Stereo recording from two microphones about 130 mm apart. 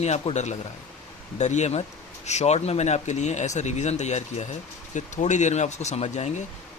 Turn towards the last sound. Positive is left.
turn(degrees=60)  # may be behind; listen again after turning